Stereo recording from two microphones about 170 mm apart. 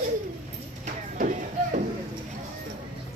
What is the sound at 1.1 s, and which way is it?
Music, 50° right (ahead or behind).